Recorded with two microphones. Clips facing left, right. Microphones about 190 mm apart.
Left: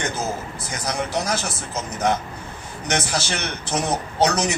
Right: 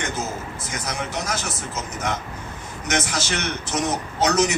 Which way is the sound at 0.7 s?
35° left (ahead or behind).